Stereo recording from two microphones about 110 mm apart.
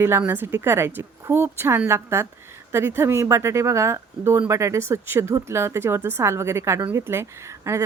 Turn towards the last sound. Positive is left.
turn(degrees=-25)  # may be behind; listen again after turning